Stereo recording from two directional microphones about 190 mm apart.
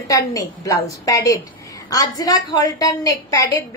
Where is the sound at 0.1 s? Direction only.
20° left (ahead or behind).